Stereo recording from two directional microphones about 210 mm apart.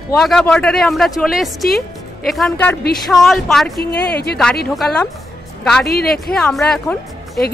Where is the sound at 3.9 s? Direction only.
50° left (ahead or behind).